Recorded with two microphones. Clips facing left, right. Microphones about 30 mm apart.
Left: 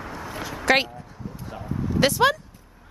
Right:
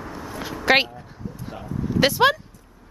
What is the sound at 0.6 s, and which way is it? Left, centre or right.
Speech, centre.